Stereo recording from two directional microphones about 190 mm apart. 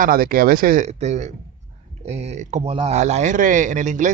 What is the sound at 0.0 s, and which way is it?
Speech, 50° right (ahead or behind).